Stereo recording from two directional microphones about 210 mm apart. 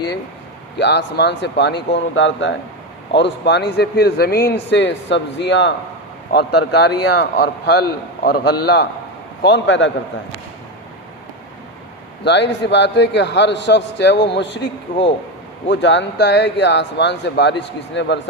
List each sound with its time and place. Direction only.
0.8 s a man's voice: 55° left (ahead or behind)
12.2 s a man's voice: 55° left (ahead or behind)
15.7 s a man's voice: 55° left (ahead or behind)